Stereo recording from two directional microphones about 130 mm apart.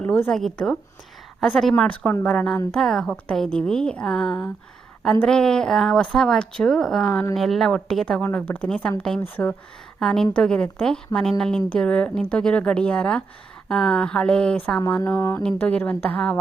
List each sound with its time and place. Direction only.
0.0 s speech: 10° left (ahead or behind)
10.0 s speech: 5° left (ahead or behind)
15.2 s speech: 20° left (ahead or behind)
15.4 s speech: 10° left (ahead or behind)